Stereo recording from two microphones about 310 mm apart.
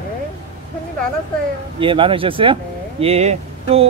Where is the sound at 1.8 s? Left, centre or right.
Centre.